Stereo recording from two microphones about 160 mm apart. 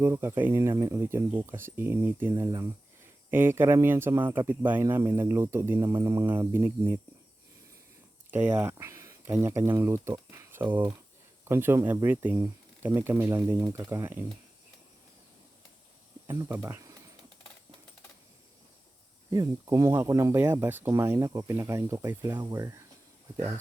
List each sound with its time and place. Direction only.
0.0 s speech: 15° right (ahead or behind)
8.3 s speech: 10° right (ahead or behind)
16.2 s speech: 20° right (ahead or behind)
19.3 s speech: 20° right (ahead or behind)